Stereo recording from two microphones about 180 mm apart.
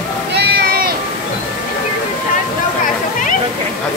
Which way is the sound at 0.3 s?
65° right (ahead or behind).